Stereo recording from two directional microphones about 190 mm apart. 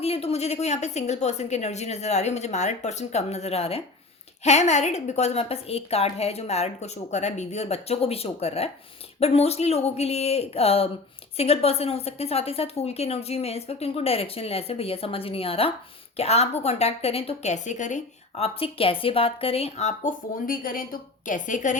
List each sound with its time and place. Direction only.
0.0 s a woman's voice: 30° left (ahead or behind)